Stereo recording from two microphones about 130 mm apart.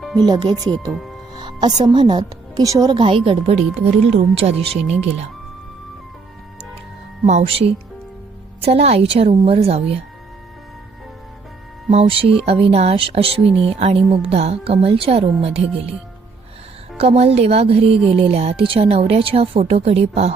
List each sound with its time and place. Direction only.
0.2 s a woman's voice: 35° right (ahead or behind); by 4.5 s 55° right (ahead or behind)
7.3 s speech: 50° right (ahead or behind)
11.9 s speech: 50° right (ahead or behind)
17.0 s speech: 50° right (ahead or behind)